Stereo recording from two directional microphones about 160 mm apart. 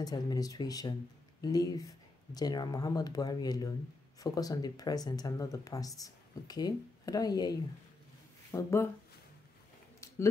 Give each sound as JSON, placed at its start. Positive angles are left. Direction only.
{"t": 0.0, "sound": "speech", "side_deg": 25}